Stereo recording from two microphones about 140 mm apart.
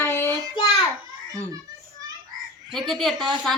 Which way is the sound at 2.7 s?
5° left (ahead or behind).